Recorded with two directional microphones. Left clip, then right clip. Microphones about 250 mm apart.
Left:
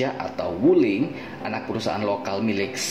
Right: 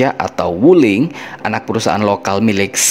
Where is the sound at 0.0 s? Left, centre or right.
Right.